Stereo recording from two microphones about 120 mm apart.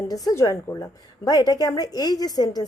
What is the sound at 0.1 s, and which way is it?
A woman's voice, 30° left (ahead or behind).